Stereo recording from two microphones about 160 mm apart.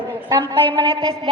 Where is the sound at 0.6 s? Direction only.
30° right (ahead or behind).